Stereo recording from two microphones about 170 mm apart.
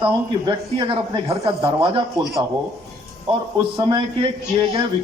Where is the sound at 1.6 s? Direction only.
35° right (ahead or behind).